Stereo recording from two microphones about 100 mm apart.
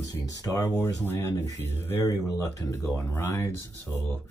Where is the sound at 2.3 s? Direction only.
35° left (ahead or behind).